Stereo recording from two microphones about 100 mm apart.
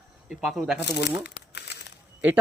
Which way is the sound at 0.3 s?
Centre (ahead or behind).